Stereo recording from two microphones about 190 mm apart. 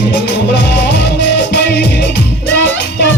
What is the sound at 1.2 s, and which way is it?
Music, 65° left (ahead or behind).